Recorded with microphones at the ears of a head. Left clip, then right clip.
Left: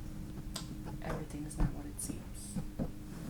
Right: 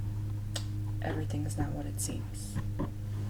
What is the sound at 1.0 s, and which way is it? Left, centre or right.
Speech, right.